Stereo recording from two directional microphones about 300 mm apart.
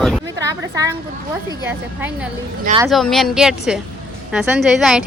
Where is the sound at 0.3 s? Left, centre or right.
Centre.